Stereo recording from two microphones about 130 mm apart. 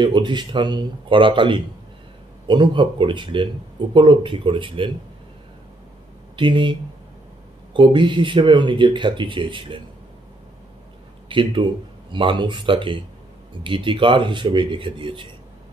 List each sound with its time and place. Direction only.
0.0 s speech: 35° right (ahead or behind)
6.3 s speech: 40° right (ahead or behind)
11.2 s speech: 40° right (ahead or behind)